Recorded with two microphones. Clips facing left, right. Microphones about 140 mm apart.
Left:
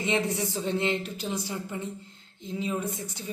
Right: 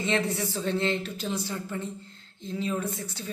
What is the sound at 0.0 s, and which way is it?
A man's voice, 15° left (ahead or behind).